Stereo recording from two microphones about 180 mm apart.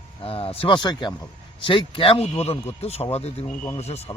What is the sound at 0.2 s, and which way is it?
Speech, 30° left (ahead or behind).